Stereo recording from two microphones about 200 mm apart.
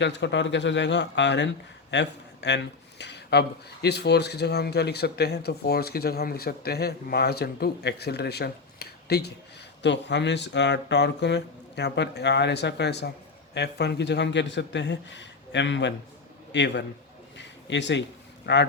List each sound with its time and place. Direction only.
0.0 s a man's voice: 60° left (ahead or behind)
17.3 s a sound: 60° left (ahead or behind)
18.5 s speech: 60° left (ahead or behind)